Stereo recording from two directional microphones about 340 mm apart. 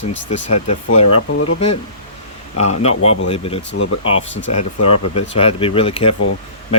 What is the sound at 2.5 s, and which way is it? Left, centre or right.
Speech, centre.